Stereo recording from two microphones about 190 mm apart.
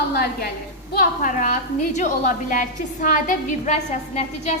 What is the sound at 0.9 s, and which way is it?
A woman's voice, 40° left (ahead or behind).